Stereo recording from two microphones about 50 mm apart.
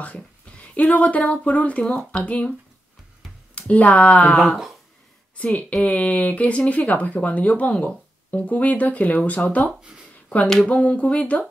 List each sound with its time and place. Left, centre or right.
0.0 s speech: left
3.5 s speech: left
5.4 s speech: left
10.7 s speech: left